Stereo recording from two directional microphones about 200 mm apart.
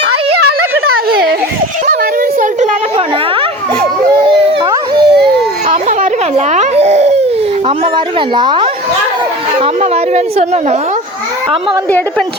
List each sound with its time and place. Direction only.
0.9 s a sound: 50° right (ahead or behind)
4.2 s dog: 25° right (ahead or behind)
5.6 s baby cry: 35° right (ahead or behind)
7.9 s a woman's voice: 25° right (ahead or behind)